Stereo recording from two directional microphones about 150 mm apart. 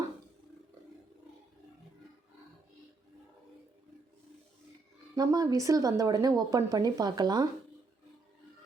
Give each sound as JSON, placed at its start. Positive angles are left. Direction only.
{"t": 5.1, "sound": "speech", "side_deg": -25}